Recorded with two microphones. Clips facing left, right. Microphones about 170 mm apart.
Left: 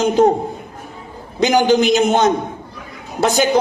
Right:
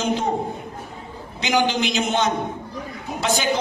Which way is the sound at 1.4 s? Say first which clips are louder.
Left 8 dB; 45° left (ahead or behind).